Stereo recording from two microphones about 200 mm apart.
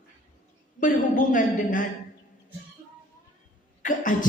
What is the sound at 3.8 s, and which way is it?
Speech, 40° left (ahead or behind).